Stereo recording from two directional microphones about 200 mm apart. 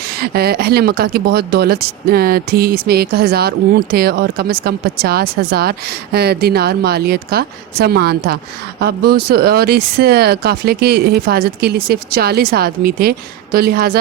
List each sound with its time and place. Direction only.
0.1 s speech: 50° right (ahead or behind)